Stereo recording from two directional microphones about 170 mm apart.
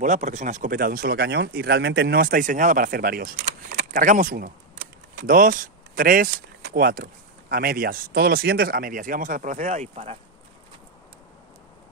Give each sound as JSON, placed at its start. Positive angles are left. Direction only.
{"t": 0.0, "sound": "speech", "side_deg": -45}